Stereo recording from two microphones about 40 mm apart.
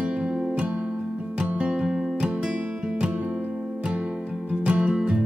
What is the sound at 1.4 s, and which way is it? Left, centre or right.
Music, right.